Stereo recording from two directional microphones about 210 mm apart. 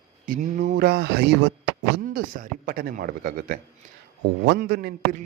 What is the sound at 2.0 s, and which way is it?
A man's voice, 40° right (ahead or behind).